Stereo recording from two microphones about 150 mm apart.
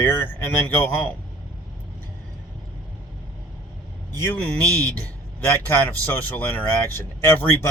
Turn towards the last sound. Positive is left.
turn(degrees=15)  # may be behind; listen again after turning